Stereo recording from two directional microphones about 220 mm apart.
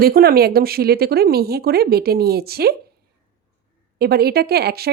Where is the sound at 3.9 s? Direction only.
45° right (ahead or behind).